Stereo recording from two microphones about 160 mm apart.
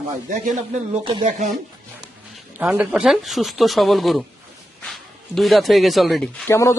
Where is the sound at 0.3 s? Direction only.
50° right (ahead or behind).